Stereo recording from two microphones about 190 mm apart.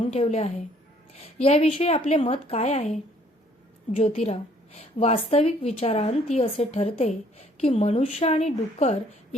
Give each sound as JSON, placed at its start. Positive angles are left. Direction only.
{"t": 0.0, "sound": "a woman's voice", "side_deg": 35}